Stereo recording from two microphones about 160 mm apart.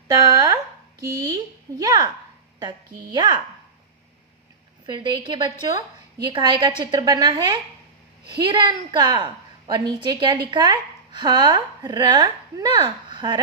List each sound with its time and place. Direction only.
0.3 s a woman's voice: 25° right (ahead or behind)
4.9 s a woman's voice: 30° right (ahead or behind)